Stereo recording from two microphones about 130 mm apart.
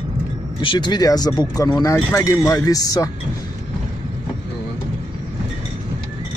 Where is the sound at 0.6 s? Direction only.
40° left (ahead or behind).